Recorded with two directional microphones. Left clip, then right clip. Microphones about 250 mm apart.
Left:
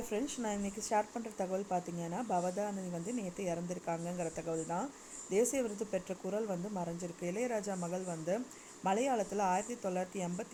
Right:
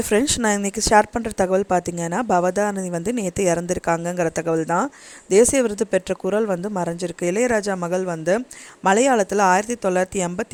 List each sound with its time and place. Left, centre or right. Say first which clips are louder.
0.1 s a woman's voice: right 19 dB; right